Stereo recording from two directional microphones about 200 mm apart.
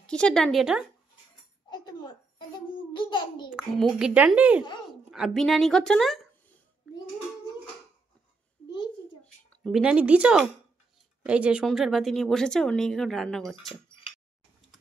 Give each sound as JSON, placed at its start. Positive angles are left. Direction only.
{"t": 0.0, "sound": "speech", "side_deg": 5}
{"t": 1.7, "sound": "a child's voice", "side_deg": 20}
{"t": 3.4, "sound": "speech", "side_deg": 0}
{"t": 9.2, "sound": "speech", "side_deg": 0}